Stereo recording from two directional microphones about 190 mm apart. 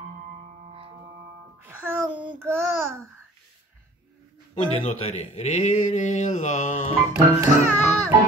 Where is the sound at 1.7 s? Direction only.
10° right (ahead or behind).